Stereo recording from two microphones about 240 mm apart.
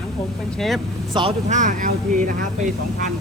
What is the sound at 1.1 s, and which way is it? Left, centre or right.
Speech, right.